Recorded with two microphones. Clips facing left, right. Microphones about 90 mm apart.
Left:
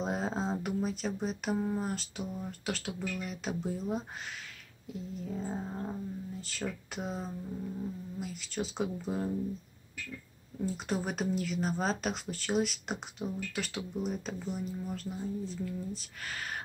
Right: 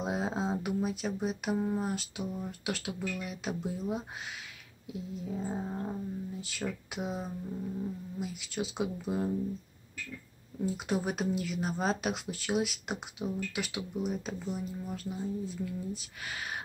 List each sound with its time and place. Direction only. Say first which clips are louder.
0.0 s speech: right 1 dB; 5° right (ahead or behind)
10.6 s speech: right 2 dB; 5° right (ahead or behind)